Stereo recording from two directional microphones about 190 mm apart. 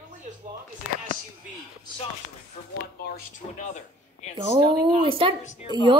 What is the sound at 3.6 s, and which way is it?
Speech, 40° left (ahead or behind).